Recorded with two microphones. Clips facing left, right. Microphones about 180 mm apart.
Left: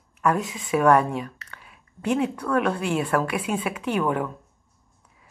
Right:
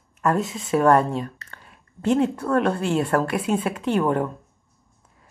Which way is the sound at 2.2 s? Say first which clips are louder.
Right 1 dB; 40° right (ahead or behind).